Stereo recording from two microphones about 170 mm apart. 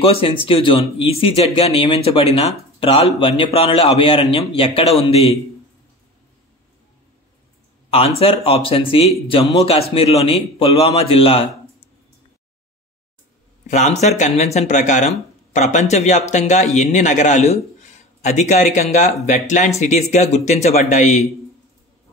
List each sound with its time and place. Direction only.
0.0 s a man's voice: 35° left (ahead or behind)
7.9 s a man's voice: 35° left (ahead or behind)
13.7 s speech: 40° left (ahead or behind)